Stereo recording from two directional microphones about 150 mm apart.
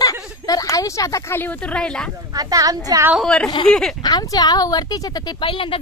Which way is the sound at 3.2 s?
5° left (ahead or behind).